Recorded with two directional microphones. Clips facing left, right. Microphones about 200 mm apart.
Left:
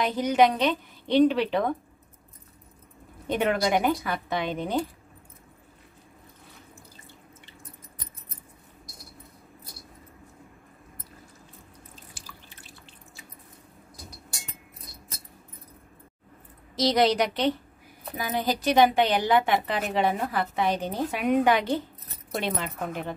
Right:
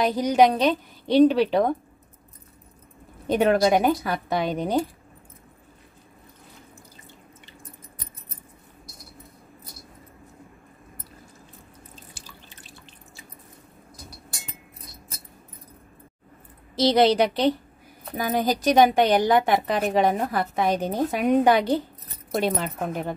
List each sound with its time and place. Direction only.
0.0 s a woman's voice: 40° right (ahead or behind)
3.3 s a woman's voice: 35° right (ahead or behind)
12.2 s drip: 25° right (ahead or behind)
16.7 s a woman's voice: 30° right (ahead or behind)